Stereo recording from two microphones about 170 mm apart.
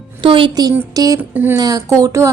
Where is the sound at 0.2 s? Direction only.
30° right (ahead or behind).